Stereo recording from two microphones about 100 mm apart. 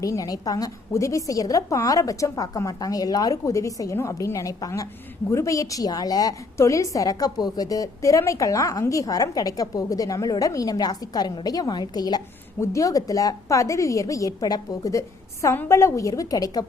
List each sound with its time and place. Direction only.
0.0 s a woman's voice: 35° left (ahead or behind)